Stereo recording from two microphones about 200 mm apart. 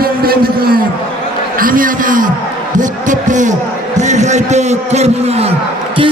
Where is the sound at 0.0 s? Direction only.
50° right (ahead or behind).